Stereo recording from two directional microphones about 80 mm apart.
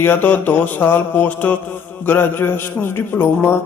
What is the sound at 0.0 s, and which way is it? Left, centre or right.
A man's voice, left.